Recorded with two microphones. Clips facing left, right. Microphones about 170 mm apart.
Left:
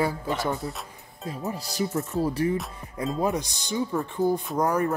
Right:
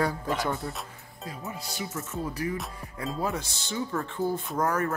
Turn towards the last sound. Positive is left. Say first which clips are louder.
# left 3 dB
turn(degrees=15)  # may be behind; listen again after turning